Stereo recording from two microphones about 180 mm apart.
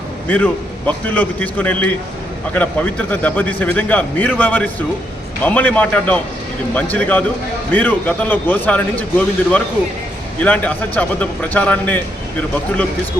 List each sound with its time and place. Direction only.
0.3 s a man's voice: 10° left (ahead or behind)